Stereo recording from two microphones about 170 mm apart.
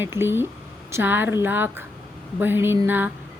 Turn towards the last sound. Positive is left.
turn(degrees=-10)  # may be behind; listen again after turning